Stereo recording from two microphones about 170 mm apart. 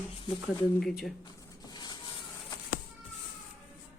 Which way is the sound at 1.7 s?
25° left (ahead or behind).